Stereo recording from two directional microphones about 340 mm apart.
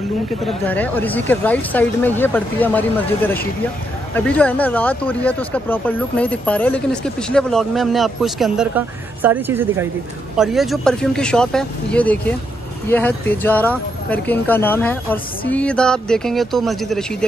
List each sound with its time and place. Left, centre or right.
0.4 s speech: centre